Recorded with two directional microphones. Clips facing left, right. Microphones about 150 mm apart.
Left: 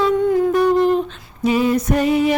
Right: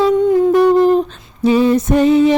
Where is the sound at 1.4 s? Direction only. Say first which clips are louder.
Right 4 dB; 30° right (ahead or behind).